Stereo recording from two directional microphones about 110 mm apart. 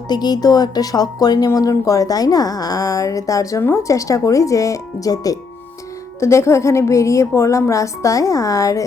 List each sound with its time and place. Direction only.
0.1 s a woman's voice: 40° left (ahead or behind)